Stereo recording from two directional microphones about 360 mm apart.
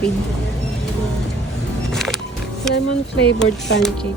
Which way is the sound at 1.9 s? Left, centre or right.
Centre.